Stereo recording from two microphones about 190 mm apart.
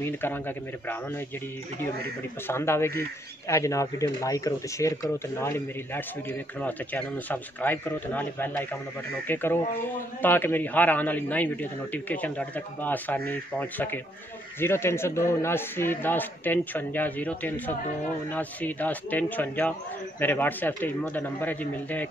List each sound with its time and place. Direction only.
0.0 s speech: 10° left (ahead or behind)
2.4 s speech: 15° left (ahead or behind)